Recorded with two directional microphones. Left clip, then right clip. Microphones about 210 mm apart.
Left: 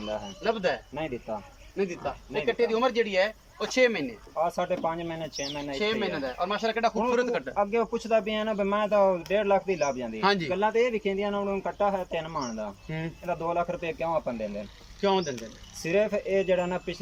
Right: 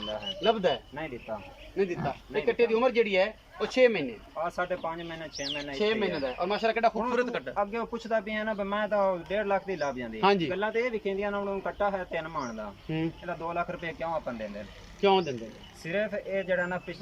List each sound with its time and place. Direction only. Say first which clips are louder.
0.4 s speech: right 2 dB; 10° right (ahead or behind)
0.9 s a man's voice: left 3 dB; 15° left (ahead or behind)
1.7 s speech: right 1 dB; centre (ahead or behind)
4.4 s a man's voice: left 4 dB; 15° left (ahead or behind)
5.7 s a man's voice: even; 5° right (ahead or behind)
10.2 s speech: right 2 dB; 10° right (ahead or behind)
10.5 s a man's voice: left 4 dB; 10° left (ahead or behind)
13.2 s a man's voice: left 4 dB; 10° left (ahead or behind)
15.0 s speech: right 2 dB; 5° right (ahead or behind)
15.8 s a man's voice: left 5 dB; 10° left (ahead or behind)